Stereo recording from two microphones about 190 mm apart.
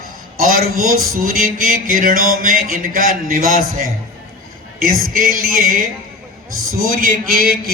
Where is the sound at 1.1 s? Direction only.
50° right (ahead or behind).